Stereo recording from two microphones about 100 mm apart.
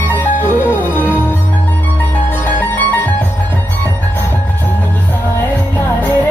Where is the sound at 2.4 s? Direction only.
20° left (ahead or behind).